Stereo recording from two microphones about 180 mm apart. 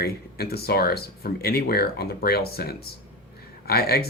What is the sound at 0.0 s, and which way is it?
Speech, 60° left (ahead or behind).